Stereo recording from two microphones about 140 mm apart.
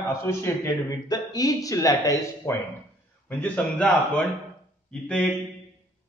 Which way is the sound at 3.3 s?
10° left (ahead or behind).